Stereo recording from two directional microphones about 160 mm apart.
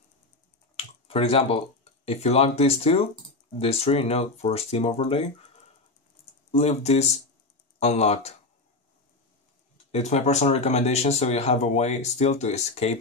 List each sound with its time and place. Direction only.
0.7 s a sound: 35° left (ahead or behind)
2.0 s speech: 40° left (ahead or behind)
6.5 s speech: 40° left (ahead or behind)
9.8 s speech: 40° left (ahead or behind)